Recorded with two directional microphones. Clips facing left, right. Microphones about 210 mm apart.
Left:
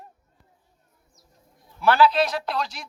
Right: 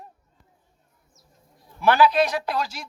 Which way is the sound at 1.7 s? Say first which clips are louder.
Right 1 dB; 15° right (ahead or behind).